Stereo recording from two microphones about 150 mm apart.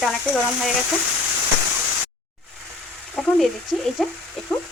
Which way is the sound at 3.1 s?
Centre (ahead or behind).